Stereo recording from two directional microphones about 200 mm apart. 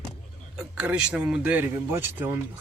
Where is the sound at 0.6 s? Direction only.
5° right (ahead or behind).